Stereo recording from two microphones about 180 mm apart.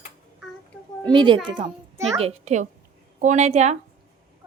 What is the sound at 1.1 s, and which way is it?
Speech, 25° right (ahead or behind).